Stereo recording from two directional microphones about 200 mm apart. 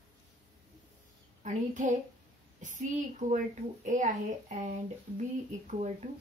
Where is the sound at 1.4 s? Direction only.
40° right (ahead or behind).